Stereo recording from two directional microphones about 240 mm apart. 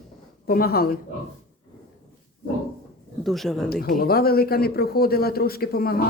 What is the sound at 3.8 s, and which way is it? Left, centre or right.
Speech, left.